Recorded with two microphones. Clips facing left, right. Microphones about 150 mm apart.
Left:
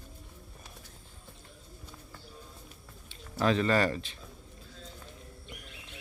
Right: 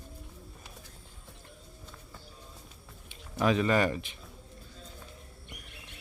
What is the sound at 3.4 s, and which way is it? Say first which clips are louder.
Speech: even; 15° right (ahead or behind).